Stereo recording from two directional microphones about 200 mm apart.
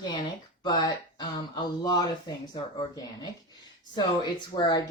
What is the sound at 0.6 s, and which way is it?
Speech, 20° left (ahead or behind).